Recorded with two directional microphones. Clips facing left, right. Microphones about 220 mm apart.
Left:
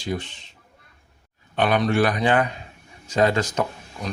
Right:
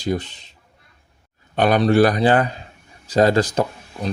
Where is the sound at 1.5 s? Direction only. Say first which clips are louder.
Right 5 dB; 40° right (ahead or behind).